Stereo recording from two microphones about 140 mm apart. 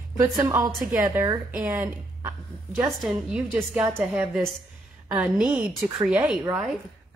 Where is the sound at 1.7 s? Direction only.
20° right (ahead or behind).